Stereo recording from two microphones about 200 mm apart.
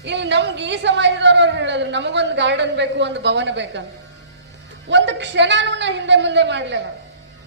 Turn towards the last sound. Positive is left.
turn(degrees=-60)  # may be behind; listen again after turning